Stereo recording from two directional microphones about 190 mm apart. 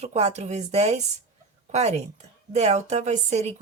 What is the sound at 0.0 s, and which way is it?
Speech, 35° right (ahead or behind).